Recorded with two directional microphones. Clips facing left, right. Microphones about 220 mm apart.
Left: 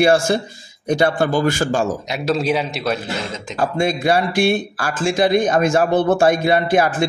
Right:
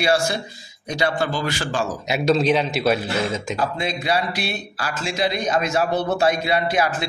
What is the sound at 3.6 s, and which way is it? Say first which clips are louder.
Speech: left 5 dB; 50° left (ahead or behind).